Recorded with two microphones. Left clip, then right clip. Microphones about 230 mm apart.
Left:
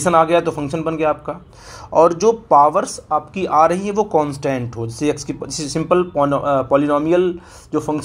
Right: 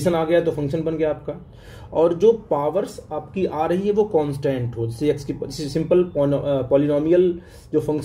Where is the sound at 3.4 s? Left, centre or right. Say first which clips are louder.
Left 6 dB; centre.